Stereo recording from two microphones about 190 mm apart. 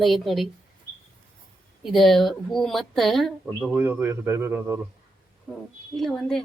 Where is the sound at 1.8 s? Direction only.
Centre (ahead or behind).